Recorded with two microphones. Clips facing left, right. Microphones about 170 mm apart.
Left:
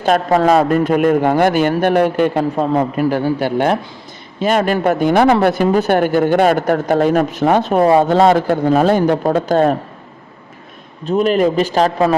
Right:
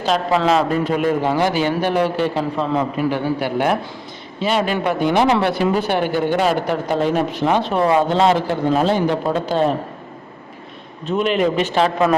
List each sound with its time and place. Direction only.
0.0 s speech: 50° left (ahead or behind)
3.4 s a man's voice: 30° left (ahead or behind)
4.4 s speech: 50° left (ahead or behind)
11.0 s a man's voice: 40° left (ahead or behind)